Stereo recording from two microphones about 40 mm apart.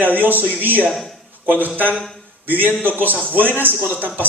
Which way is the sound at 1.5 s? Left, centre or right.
Right.